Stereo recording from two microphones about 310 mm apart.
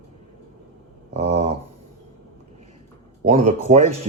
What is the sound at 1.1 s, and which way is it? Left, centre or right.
Speech, right.